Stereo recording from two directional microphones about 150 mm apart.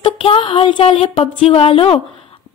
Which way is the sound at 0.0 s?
35° left (ahead or behind).